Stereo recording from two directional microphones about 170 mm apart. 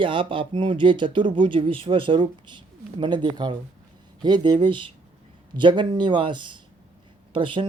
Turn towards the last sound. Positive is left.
turn(degrees=-30)  # may be behind; listen again after turning